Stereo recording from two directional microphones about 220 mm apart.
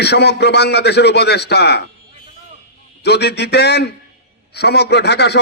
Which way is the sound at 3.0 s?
50° left (ahead or behind).